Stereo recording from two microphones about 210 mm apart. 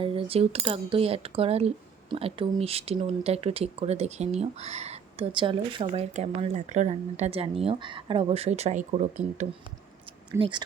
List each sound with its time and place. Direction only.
0.0 s speech: 25° right (ahead or behind)
10.3 s speech: 25° right (ahead or behind)